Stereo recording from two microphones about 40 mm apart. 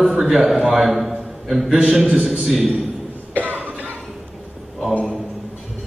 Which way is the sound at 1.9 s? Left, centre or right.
Right.